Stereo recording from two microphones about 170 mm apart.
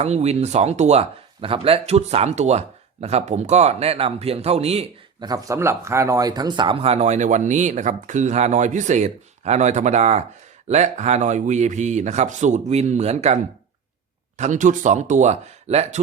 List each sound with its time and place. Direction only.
0.0 s speech: 40° right (ahead or behind)
5.2 s speech: 20° right (ahead or behind); by 16.0 s 40° right (ahead or behind)